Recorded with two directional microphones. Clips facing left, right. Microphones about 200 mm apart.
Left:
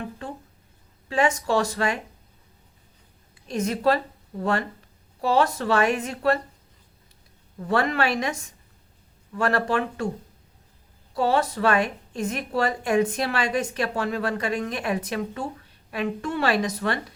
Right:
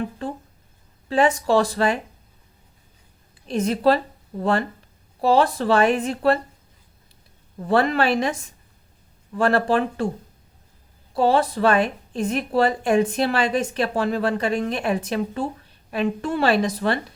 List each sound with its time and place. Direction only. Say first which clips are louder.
1.0 s a woman's voice: right 4 dB; 35° right (ahead or behind)
3.4 s a woman's voice: right 4 dB; 30° right (ahead or behind)
5.2 s a woman's voice: right 4 dB; 30° right (ahead or behind)
7.7 s a woman's voice: right 4 dB; 30° right (ahead or behind)
9.4 s a woman's voice: right 4 dB; 30° right (ahead or behind)
11.1 s a woman's voice: right 4 dB; 30° right (ahead or behind)